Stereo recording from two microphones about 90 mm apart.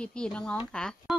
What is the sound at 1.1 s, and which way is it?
Speech, 5° right (ahead or behind).